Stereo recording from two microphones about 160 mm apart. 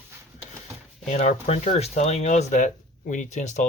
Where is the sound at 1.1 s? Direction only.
45° left (ahead or behind).